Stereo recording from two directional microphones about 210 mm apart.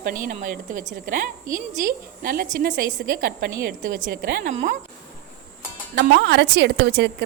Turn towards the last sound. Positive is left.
turn(degrees=-55)  # may be behind; listen again after turning